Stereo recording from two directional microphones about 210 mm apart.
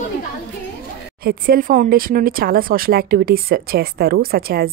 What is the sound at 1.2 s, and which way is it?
Speech, 45° right (ahead or behind).